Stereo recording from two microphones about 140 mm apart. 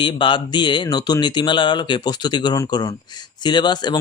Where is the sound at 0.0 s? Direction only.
35° left (ahead or behind).